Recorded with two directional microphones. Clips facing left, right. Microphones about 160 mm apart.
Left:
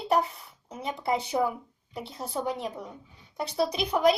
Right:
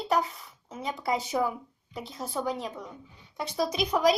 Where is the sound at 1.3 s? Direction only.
15° left (ahead or behind).